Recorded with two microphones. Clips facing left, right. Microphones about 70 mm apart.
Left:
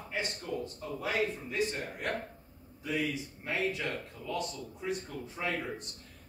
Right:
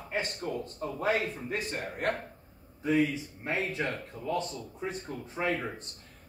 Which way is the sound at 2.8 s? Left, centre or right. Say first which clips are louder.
Right 6 dB; right.